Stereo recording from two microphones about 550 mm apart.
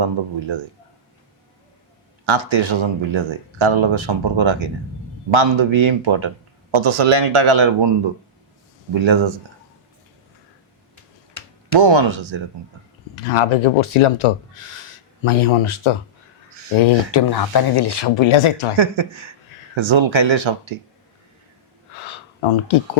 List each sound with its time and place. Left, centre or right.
0.0 s a man's voice: right
2.2 s a man's voice: right
11.7 s a man's voice: right
13.2 s speech: left
16.8 s speech: left
19.7 s a man's voice: right
22.4 s speech: left